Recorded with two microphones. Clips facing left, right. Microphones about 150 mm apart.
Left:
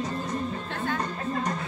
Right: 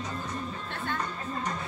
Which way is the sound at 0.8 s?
45° left (ahead or behind).